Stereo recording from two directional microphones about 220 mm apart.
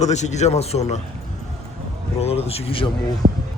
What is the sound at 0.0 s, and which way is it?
Speech, 30° left (ahead or behind).